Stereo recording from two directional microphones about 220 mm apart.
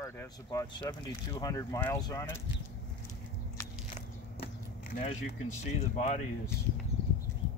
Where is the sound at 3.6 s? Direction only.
10° left (ahead or behind).